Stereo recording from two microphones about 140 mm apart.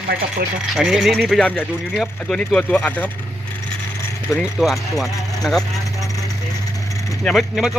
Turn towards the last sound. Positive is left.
turn(degrees=0)  # may be behind; listen again after turning